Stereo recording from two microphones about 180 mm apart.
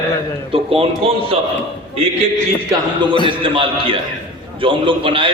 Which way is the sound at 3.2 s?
30° right (ahead or behind).